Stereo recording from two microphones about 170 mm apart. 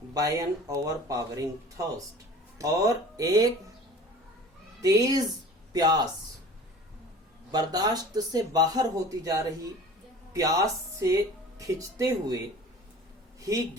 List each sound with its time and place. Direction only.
0.1 s speech: 20° right (ahead or behind)
4.8 s speech: 20° right (ahead or behind)
7.5 s speech: 25° right (ahead or behind)